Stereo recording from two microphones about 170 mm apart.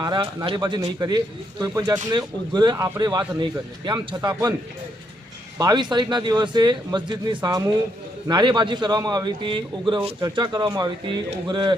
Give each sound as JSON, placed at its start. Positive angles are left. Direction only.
{"t": 0.0, "sound": "speech", "side_deg": -25}
{"t": 5.5, "sound": "speech", "side_deg": -25}